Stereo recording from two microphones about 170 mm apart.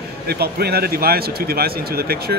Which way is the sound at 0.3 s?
70° right (ahead or behind).